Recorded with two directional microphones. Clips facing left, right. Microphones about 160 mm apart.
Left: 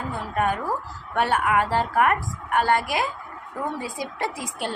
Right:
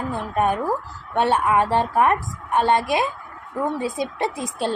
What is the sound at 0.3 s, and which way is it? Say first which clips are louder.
A woman's voice: right 3 dB; 25° right (ahead or behind).